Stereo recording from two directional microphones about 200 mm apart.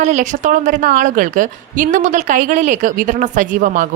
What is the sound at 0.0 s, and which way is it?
Speech, 35° right (ahead or behind).